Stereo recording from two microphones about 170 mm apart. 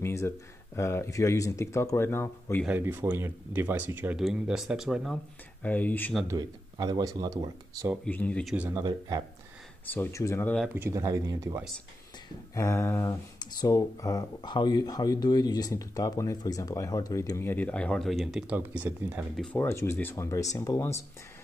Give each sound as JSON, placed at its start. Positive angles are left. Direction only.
{"t": 0.0, "sound": "speech", "side_deg": 15}
{"t": 2.6, "sound": "speech", "side_deg": -10}
{"t": 6.2, "sound": "speech", "side_deg": -25}
{"t": 8.0, "sound": "speech", "side_deg": 10}
{"t": 8.5, "sound": "speech", "side_deg": -15}
{"t": 9.8, "sound": "speech", "side_deg": 15}
{"t": 10.7, "sound": "speech", "side_deg": -15}
{"t": 12.5, "sound": "speech", "side_deg": 15}
{"t": 19.3, "sound": "speech", "side_deg": 5}